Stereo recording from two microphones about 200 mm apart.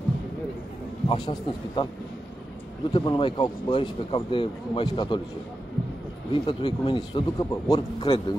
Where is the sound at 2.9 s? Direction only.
20° left (ahead or behind).